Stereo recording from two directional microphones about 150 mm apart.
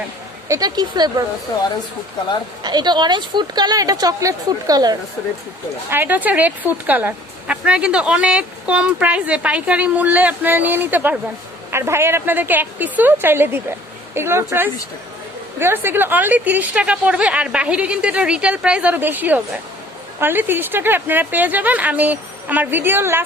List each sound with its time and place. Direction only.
0.4 s a woman's voice: 25° right (ahead or behind)
2.6 s a woman's voice: 30° right (ahead or behind)
5.9 s speech: 15° right (ahead or behind)